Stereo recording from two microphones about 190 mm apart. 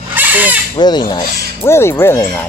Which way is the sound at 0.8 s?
20° left (ahead or behind).